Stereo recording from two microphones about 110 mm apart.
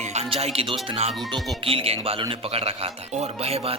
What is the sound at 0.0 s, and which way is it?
Speech, 80° right.